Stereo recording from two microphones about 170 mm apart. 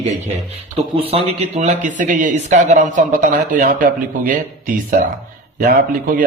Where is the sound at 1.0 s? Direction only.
35° right (ahead or behind).